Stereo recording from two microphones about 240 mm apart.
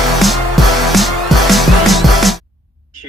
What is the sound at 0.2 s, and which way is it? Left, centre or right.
Music, centre.